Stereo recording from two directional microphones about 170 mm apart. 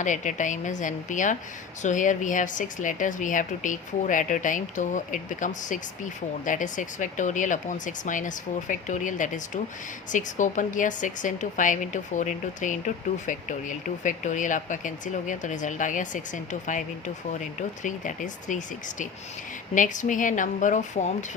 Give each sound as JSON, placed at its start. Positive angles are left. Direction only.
{"t": 0.0, "sound": "speech", "side_deg": 45}
{"t": 17.8, "sound": "speech", "side_deg": 45}